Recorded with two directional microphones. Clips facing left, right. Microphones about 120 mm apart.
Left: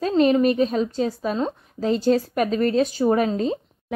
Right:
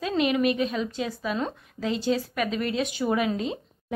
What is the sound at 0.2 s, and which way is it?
Speech, 35° left (ahead or behind).